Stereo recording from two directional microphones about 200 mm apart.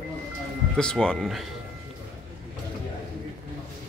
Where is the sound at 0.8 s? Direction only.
5° left (ahead or behind).